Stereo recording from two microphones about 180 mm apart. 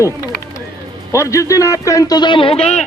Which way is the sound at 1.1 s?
15° left (ahead or behind).